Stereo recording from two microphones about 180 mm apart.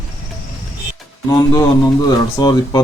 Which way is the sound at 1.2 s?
20° left (ahead or behind).